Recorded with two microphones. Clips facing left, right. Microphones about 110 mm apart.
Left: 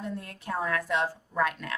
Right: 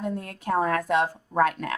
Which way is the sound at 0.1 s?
50° right (ahead or behind).